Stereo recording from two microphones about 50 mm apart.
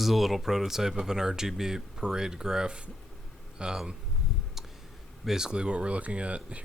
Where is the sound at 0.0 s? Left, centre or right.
Centre.